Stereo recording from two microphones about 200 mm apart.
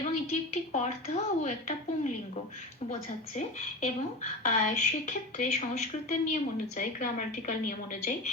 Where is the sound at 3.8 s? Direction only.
35° left (ahead or behind).